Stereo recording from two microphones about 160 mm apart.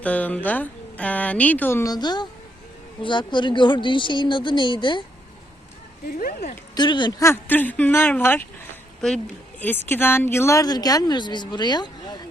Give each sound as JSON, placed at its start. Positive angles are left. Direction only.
{"t": 0.0, "sound": "speech", "side_deg": 10}
{"t": 6.1, "sound": "speech", "side_deg": 65}
{"t": 6.7, "sound": "a woman's voice", "side_deg": 30}